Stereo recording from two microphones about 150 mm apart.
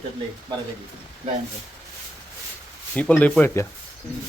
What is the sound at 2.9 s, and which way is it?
Speech, 10° left (ahead or behind).